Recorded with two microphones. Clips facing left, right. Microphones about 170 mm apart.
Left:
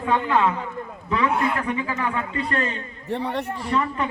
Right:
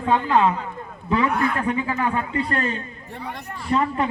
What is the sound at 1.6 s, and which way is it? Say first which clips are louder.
A man's voice: right 3 dB; 25° right (ahead or behind).